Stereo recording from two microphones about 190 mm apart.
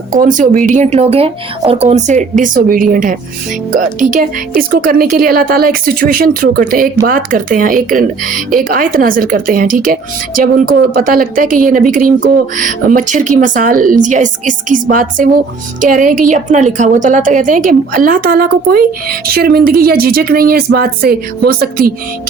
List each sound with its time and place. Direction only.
0.2 s a woman's voice: 45° right (ahead or behind)